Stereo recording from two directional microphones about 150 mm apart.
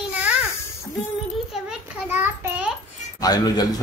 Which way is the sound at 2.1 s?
10° right (ahead or behind).